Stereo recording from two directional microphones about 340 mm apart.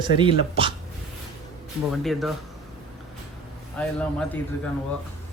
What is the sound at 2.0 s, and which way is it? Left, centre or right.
Speech, centre.